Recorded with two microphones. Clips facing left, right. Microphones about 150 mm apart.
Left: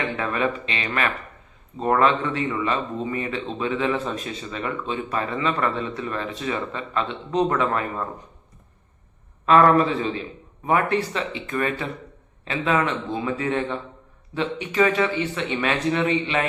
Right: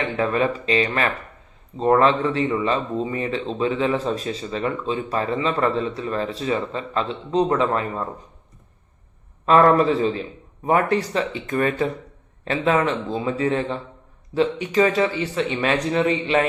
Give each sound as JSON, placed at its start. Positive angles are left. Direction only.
{"t": 0.2, "sound": "speech", "side_deg": -35}
{"t": 9.5, "sound": "speech", "side_deg": -35}